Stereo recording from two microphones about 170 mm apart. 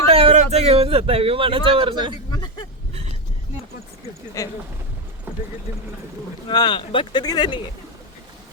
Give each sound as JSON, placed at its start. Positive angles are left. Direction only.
{"t": 0.1, "sound": "speech", "side_deg": -35}
{"t": 4.4, "sound": "speech", "side_deg": 20}
{"t": 6.5, "sound": "speech", "side_deg": 25}